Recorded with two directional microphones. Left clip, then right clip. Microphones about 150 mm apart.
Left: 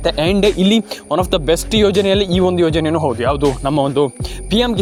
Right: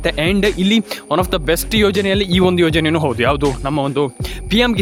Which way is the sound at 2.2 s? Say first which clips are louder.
Even; 15° right (ahead or behind).